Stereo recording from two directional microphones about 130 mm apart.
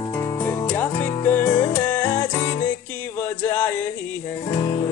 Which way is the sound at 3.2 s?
15° left (ahead or behind).